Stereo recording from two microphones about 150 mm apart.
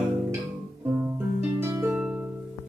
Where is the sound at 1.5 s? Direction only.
15° right (ahead or behind).